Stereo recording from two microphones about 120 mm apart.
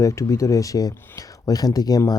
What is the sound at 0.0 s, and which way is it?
Speech, 25° left (ahead or behind).